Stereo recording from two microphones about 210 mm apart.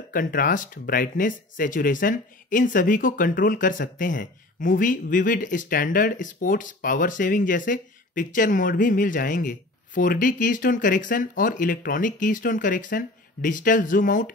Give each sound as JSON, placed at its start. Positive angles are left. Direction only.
{"t": 0.1, "sound": "speech", "side_deg": 40}